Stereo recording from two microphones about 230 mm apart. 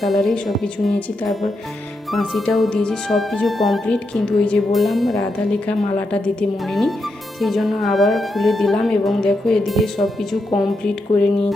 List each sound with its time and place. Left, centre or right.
0.0 s speech: centre